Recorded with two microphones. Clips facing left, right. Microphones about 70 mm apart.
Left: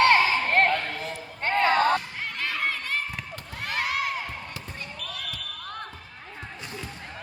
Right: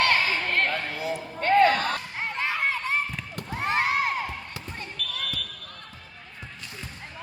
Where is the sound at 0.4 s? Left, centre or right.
Left.